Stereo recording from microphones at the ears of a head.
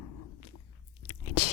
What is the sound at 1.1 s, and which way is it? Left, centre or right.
Biting, left.